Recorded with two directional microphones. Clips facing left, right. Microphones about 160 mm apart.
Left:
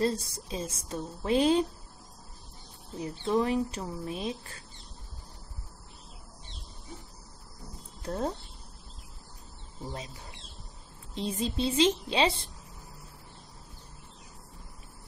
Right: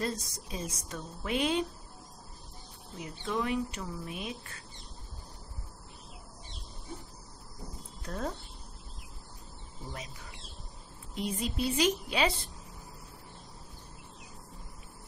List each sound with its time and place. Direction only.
0.0 s a woman's voice: 30° left (ahead or behind)
3.0 s speech: 35° left (ahead or behind)
8.0 s speech: 30° left (ahead or behind)
9.9 s a woman's voice: 30° left (ahead or behind)